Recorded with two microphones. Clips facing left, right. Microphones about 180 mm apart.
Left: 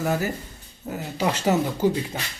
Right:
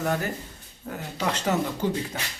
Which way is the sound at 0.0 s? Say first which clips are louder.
Left 2 dB; 5° left (ahead or behind).